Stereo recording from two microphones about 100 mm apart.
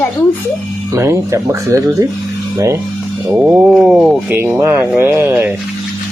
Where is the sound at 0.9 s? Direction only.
30° right (ahead or behind).